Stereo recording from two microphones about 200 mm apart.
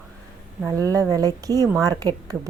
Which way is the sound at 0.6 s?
15° right (ahead or behind).